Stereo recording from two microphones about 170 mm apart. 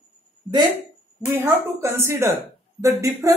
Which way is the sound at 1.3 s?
15° right (ahead or behind).